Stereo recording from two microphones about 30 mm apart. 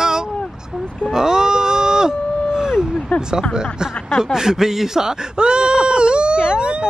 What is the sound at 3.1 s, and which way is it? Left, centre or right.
Speech, left.